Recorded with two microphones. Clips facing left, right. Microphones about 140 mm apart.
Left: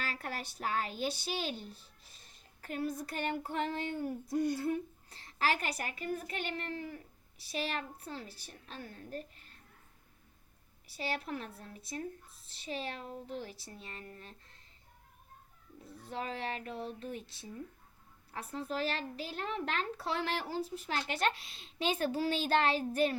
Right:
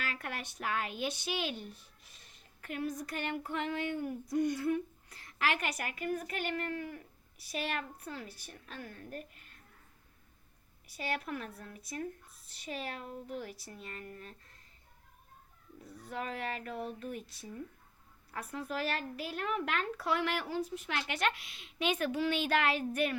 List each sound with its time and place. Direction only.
0.0 s a woman's voice: 35° left (ahead or behind)
10.8 s a woman's voice: 30° left (ahead or behind)
15.8 s a woman's voice: 25° left (ahead or behind)